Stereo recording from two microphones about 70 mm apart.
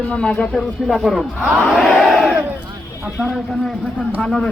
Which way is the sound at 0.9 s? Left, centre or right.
Centre.